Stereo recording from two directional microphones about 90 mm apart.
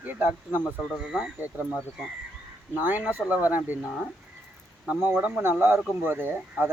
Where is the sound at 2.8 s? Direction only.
20° right (ahead or behind).